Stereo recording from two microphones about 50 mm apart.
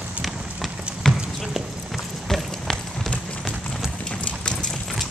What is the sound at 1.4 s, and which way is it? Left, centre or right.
Clip-clop, centre.